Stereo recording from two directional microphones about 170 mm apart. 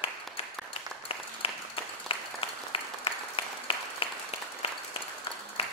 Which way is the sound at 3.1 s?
30° left (ahead or behind).